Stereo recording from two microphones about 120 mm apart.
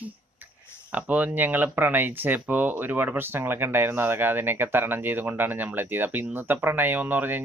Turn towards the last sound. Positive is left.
turn(degrees=-15)  # may be behind; listen again after turning